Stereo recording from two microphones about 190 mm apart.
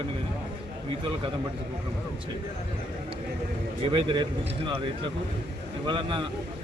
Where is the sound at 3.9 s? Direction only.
25° right (ahead or behind).